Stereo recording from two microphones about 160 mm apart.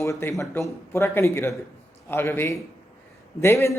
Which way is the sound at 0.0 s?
15° left (ahead or behind).